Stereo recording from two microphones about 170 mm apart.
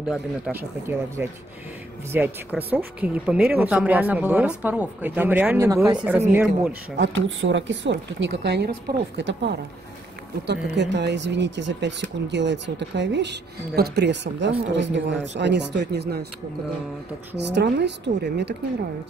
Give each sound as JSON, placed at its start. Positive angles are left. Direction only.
{"t": 0.1, "sound": "speech", "side_deg": -10}
{"t": 7.0, "sound": "speech", "side_deg": -90}
{"t": 17.4, "sound": "speech", "side_deg": -90}